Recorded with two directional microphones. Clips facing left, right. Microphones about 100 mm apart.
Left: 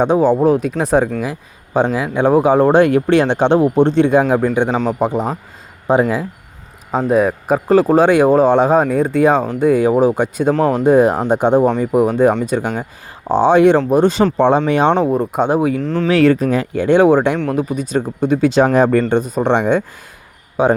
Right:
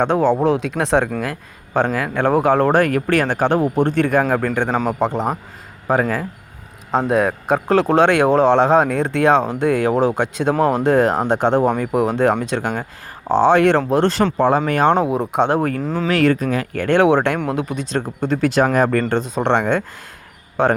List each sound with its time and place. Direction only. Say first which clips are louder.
0.0 s speech: left 3 dB; 10° left (ahead or behind)
4.7 s speech: left 2 dB; 5° right (ahead or behind)
4.9 s speech: left 2 dB; 15° left (ahead or behind)
7.1 s speech: left 4 dB; 5° left (ahead or behind)
10.5 s speech: left 1 dB; 10° right (ahead or behind)
10.8 s speech: left 4 dB; 10° left (ahead or behind)
14.3 s speech: left 3 dB; 25° left (ahead or behind)
14.9 s speech: left 2 dB; 5° right (ahead or behind)
15.8 s speech: left 3 dB; 5° right (ahead or behind)
16.0 s speech: left 4 dB; 35° left (ahead or behind)
16.7 s speech: left 3 dB; 15° left (ahead or behind)
17.3 s speech: left 3 dB; 5° right (ahead or behind)
17.6 s speech: left 4 dB; 5° left (ahead or behind)